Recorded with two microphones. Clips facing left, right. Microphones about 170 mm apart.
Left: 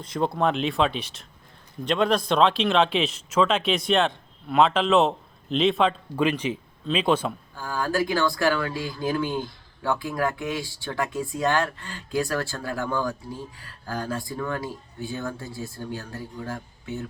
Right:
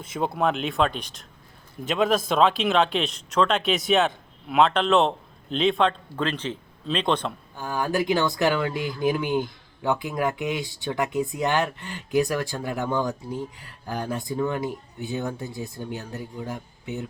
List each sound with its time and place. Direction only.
0.0 s speech: 5° right (ahead or behind)
7.5 s speech: 20° right (ahead or behind)